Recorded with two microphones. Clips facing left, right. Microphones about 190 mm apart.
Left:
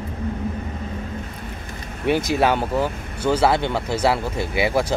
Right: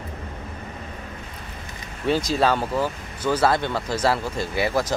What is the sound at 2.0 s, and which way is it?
Speech, 20° left (ahead or behind).